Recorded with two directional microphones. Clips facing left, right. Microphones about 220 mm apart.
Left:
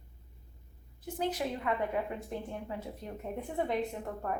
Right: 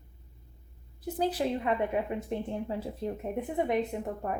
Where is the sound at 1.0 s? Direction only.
35° right (ahead or behind).